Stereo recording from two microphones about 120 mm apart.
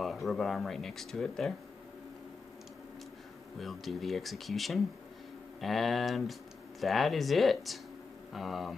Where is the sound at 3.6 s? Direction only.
Centre (ahead or behind).